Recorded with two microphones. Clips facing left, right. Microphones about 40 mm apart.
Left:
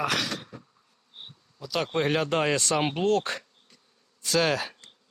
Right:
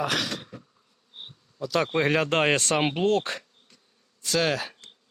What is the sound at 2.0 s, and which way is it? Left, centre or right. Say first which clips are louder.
Speech: right 1 dB; right.